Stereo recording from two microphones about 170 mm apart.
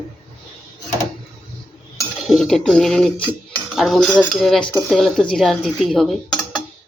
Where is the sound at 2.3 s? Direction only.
Centre (ahead or behind).